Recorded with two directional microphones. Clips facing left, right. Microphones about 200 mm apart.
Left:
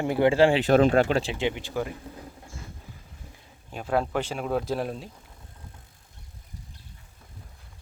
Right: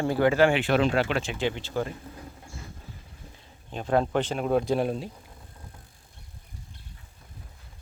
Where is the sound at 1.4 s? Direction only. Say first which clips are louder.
Even; 15° left (ahead or behind).